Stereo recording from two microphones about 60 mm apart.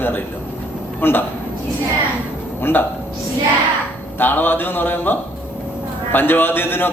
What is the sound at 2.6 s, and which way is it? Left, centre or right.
Speech, left.